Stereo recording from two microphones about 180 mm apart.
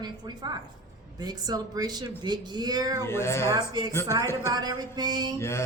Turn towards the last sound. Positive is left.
turn(degrees=15)  # may be behind; listen again after turning